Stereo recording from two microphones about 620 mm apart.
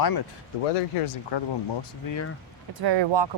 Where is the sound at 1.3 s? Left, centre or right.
Left.